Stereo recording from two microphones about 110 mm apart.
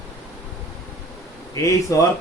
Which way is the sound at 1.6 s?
30° left (ahead or behind).